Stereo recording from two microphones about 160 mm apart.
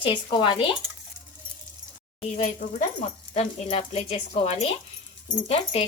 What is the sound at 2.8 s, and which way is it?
Speech, 50° left (ahead or behind).